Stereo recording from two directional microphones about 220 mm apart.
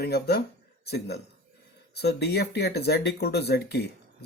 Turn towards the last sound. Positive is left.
turn(degrees=50)  # may be behind; listen again after turning